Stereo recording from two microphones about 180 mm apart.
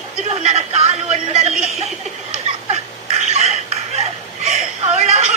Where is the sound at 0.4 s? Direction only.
35° right (ahead or behind).